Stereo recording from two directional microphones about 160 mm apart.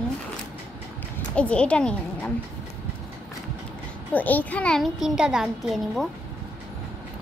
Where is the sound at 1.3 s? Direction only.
5° left (ahead or behind).